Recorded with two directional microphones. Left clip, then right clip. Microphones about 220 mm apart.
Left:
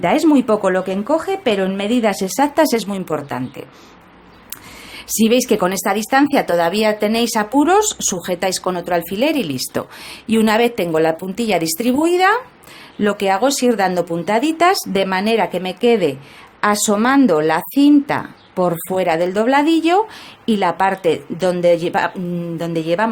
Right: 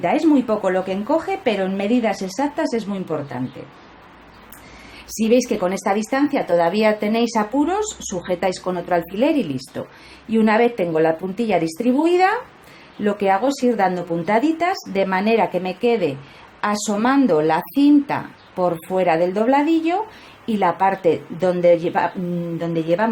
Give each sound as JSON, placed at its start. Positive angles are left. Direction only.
{"t": 0.0, "sound": "speech", "side_deg": 30}
{"t": 5.0, "sound": "speech", "side_deg": 35}